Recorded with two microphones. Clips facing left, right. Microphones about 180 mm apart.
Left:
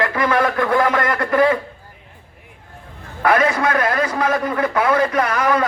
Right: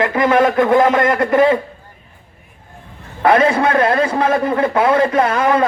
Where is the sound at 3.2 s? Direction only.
30° right (ahead or behind).